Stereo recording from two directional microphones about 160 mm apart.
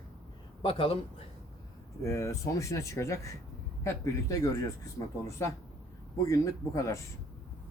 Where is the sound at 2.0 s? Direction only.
15° left (ahead or behind).